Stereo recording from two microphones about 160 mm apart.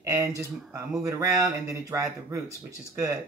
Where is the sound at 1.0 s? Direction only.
20° right (ahead or behind).